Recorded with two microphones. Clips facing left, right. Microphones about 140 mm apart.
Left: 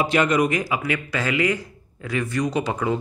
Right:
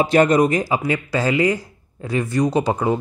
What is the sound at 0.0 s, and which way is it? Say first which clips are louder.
Speech: right 5 dB; 40° right (ahead or behind).